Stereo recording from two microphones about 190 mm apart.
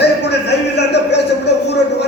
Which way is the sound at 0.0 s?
60° left (ahead or behind).